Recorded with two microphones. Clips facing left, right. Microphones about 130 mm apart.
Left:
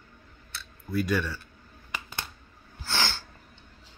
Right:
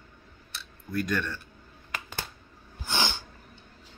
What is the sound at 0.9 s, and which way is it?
Speech, 5° left (ahead or behind).